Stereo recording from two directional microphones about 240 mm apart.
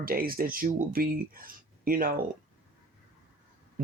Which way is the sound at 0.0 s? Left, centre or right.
Right.